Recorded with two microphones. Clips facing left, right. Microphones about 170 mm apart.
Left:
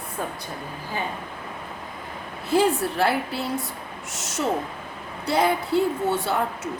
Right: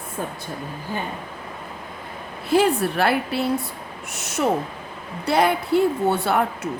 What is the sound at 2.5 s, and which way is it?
A woman's voice, 65° right (ahead or behind).